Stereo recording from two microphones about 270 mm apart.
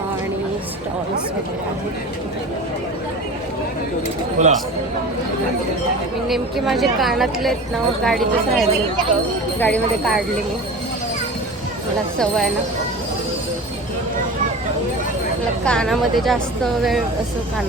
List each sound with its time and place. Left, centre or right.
4.4 s speech: right
6.2 s speech: centre
15.6 s speech: centre